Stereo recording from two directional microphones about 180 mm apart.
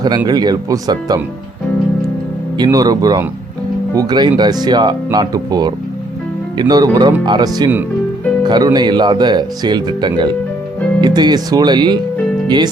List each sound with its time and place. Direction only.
0.3 s speech: 20° right (ahead or behind)
2.6 s speech: 20° right (ahead or behind)